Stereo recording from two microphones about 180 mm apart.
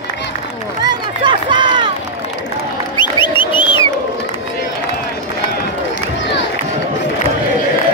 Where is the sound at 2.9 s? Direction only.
25° left (ahead or behind).